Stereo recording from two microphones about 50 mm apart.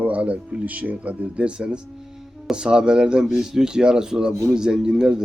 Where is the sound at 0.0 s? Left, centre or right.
Right.